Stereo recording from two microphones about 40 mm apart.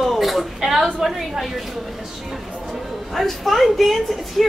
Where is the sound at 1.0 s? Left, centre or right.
Centre.